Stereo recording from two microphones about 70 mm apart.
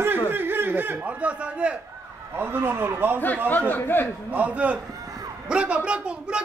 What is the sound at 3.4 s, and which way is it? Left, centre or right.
Speech, left.